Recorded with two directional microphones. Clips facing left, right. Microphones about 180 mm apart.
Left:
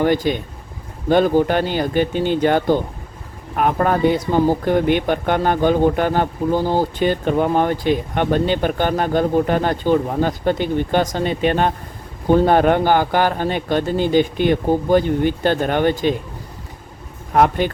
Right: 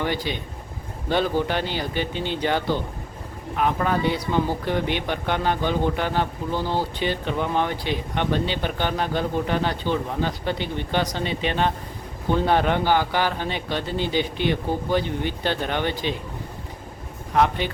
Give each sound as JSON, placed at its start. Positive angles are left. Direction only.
{"t": 0.0, "sound": "speech", "side_deg": 45}
{"t": 17.3, "sound": "speech", "side_deg": 50}